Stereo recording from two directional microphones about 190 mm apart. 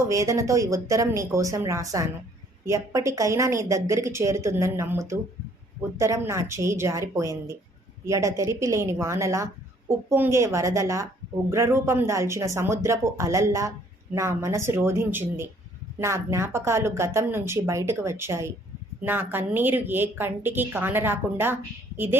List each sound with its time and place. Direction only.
0.1 s speech: 15° right (ahead or behind)